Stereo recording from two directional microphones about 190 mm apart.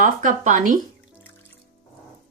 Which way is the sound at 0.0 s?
45° right (ahead or behind).